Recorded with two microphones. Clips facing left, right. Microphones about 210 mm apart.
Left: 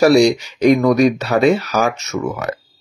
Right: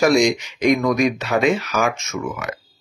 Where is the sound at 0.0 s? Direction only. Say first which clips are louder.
Left 5 dB; 35° left (ahead or behind).